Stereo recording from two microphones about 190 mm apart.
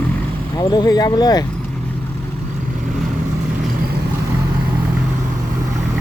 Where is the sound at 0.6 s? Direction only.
20° left (ahead or behind).